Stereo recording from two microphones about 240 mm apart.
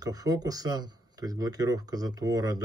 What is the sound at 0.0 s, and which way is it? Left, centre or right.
Speech, centre.